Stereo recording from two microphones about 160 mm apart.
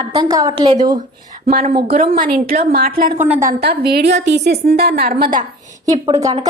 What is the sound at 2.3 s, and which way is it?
Speech, 70° right (ahead or behind).